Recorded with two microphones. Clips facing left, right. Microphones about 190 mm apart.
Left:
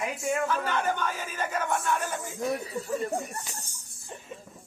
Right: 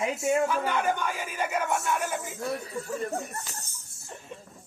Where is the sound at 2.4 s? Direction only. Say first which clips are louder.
Left 6 dB; 15° left (ahead or behind).